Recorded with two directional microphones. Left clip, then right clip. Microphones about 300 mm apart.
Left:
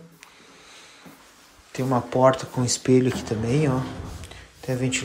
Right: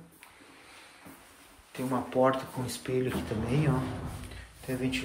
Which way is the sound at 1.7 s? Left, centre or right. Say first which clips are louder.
Left 8 dB; centre.